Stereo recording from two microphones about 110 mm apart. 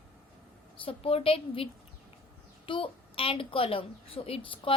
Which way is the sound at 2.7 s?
55° left (ahead or behind).